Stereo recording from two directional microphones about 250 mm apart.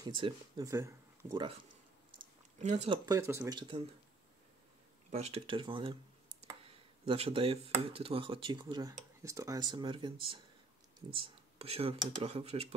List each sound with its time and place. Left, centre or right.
0.0 s speech: centre
2.6 s speech: right
3.1 s speech: centre
5.1 s speech: right